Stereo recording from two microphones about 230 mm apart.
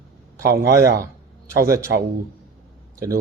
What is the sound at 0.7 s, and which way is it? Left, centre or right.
Speech, centre.